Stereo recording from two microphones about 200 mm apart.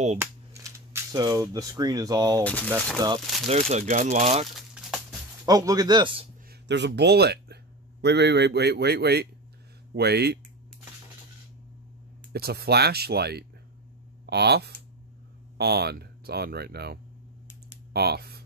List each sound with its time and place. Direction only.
0.2 s speech: 15° right (ahead or behind)
2.4 s speech: 5° left (ahead or behind)
3.4 s speech: 35° right (ahead or behind)
4.6 s a sound: centre (ahead or behind)
5.4 s speech: 15° right (ahead or behind)
6.7 s a man's voice: 60° right (ahead or behind)
12.3 s speech: 50° right (ahead or behind)